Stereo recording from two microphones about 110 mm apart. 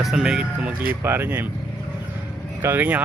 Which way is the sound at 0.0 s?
5° right (ahead or behind).